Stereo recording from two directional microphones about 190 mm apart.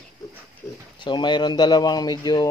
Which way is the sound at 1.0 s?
25° left (ahead or behind).